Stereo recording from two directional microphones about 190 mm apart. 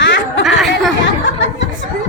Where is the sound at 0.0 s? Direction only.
75° left (ahead or behind).